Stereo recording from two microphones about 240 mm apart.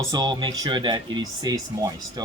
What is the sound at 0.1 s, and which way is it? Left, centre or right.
Speech, centre.